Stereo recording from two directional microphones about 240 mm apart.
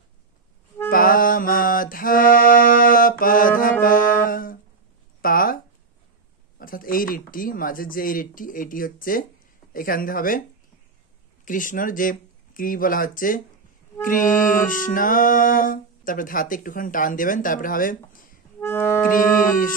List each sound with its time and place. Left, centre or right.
0.8 s music: left
3.8 s brass instrument: left
5.2 s a sound: left
6.6 s speech: left
11.4 s speech: left
18.6 s accordion: centre
19.1 s speech: left